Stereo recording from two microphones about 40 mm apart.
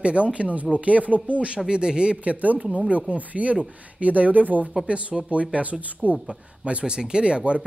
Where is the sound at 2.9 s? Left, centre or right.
Right.